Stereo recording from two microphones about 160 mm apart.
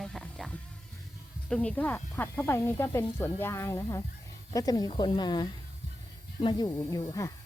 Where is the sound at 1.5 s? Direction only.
5° left (ahead or behind).